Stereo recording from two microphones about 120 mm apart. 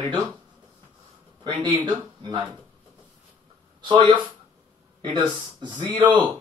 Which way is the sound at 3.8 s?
40° right (ahead or behind).